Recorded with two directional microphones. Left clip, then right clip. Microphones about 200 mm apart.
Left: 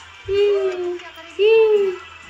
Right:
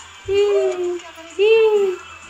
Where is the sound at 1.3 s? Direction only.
25° right (ahead or behind).